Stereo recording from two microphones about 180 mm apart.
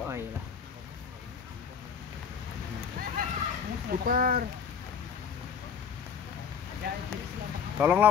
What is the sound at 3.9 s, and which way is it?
Speech, 55° right (ahead or behind).